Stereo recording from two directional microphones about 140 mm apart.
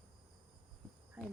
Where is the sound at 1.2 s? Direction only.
15° right (ahead or behind).